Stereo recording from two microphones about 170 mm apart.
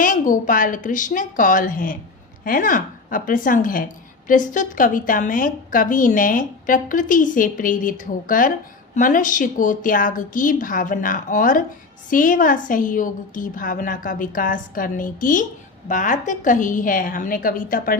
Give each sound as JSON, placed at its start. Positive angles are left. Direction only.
{"t": 0.0, "sound": "a woman's voice", "side_deg": 50}